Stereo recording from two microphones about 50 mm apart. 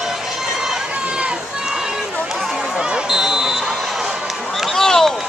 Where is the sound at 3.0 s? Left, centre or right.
Centre.